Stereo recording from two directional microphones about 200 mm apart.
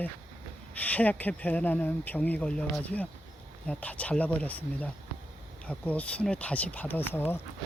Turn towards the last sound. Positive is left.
turn(degrees=10)  # may be behind; listen again after turning